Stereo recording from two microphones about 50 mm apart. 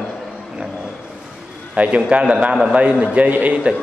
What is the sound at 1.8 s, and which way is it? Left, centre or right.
A man's voice, right.